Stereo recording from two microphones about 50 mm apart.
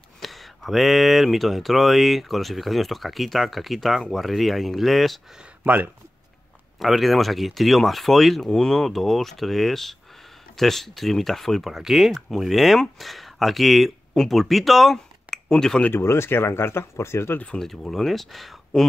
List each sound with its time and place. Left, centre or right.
0.2 s speech: centre
5.6 s speech: right
6.8 s speech: centre
11.7 s speech: centre
15.9 s speech: left
17.6 s speech: centre